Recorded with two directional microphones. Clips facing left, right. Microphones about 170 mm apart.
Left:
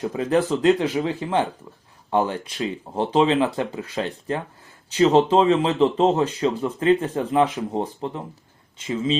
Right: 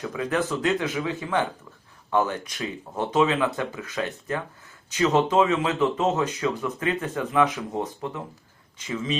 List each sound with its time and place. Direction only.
0.0 s speech: 35° left (ahead or behind)